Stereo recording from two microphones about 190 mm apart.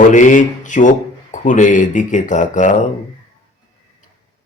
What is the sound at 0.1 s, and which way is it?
Speech, 40° left (ahead or behind).